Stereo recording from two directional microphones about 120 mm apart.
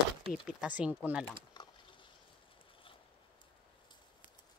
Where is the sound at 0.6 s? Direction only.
10° right (ahead or behind).